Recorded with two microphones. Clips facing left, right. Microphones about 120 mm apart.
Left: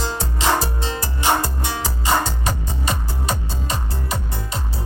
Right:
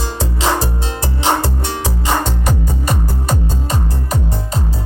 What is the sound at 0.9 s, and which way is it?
Music, 70° right (ahead or behind).